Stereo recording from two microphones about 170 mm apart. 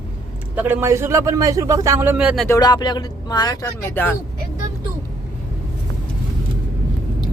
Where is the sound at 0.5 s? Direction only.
10° right (ahead or behind).